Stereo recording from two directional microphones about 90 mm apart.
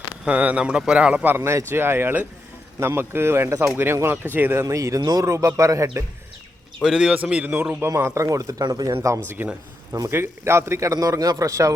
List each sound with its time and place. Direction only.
0.3 s a man's voice: 15° right (ahead or behind)
1.4 s speech: 30° right (ahead or behind)
4.6 s a man's voice: 35° right (ahead or behind)
5.3 s a man's voice: 35° right (ahead or behind)
6.8 s a man's voice: 10° right (ahead or behind)
7.9 s a man's voice: 30° right (ahead or behind)